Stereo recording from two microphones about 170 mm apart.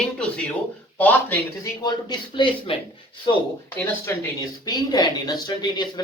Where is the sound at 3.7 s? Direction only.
20° left (ahead or behind).